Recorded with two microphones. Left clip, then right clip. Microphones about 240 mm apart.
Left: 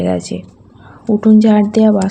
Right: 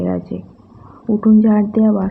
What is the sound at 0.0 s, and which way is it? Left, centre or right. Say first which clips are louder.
Speech: left 5 dB; left.